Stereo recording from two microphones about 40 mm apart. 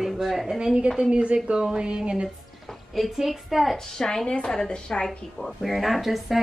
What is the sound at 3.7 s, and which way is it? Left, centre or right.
A woman's voice, centre.